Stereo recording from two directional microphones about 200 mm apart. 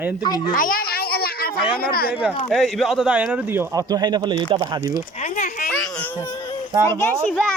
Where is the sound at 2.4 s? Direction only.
Centre (ahead or behind); by 5.0 s 20° right (ahead or behind).